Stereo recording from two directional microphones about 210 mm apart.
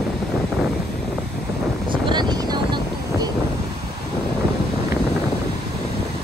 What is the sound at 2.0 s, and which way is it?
Vehicle, 20° right (ahead or behind).